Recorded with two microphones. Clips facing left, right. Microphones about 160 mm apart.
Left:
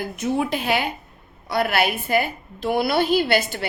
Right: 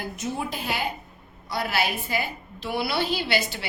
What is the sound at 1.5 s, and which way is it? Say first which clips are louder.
A woman's voice: left 6 dB; 60° left (ahead or behind).